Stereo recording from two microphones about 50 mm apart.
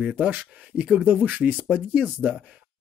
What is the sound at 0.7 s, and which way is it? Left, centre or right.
Speech, centre.